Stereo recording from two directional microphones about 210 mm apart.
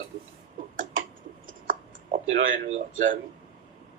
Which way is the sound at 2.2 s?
70° right (ahead or behind).